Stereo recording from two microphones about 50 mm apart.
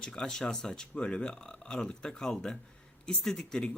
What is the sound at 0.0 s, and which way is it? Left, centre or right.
Speech, centre.